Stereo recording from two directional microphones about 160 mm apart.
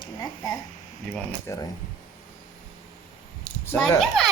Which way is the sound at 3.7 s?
5° left (ahead or behind).